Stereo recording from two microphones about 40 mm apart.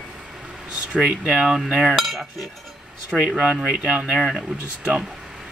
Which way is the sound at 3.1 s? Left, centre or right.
Centre.